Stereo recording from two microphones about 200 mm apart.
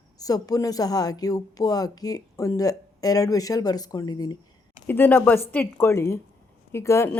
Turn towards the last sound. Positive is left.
turn(degrees=15)  # may be behind; listen again after turning